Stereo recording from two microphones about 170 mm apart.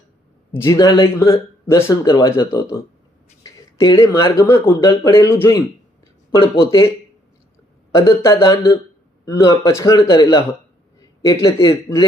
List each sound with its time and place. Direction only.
0.6 s a man's voice: 20° left (ahead or behind)
7.9 s a man's voice: 15° left (ahead or behind)